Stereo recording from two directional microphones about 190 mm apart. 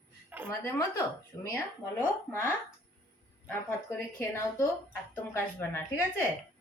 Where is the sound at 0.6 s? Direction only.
15° left (ahead or behind).